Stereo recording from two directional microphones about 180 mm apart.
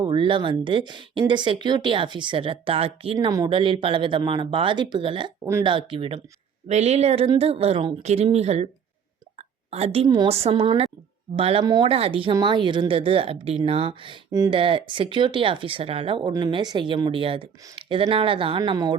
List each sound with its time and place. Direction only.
0.0 s a woman's voice: 30° right (ahead or behind)